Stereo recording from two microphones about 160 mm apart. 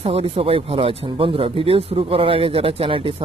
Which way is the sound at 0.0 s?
40° right (ahead or behind).